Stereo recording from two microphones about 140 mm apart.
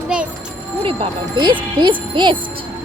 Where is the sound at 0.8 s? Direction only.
35° right (ahead or behind).